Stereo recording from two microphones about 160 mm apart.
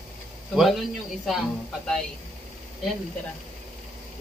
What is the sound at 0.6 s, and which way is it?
Speech, centre (ahead or behind).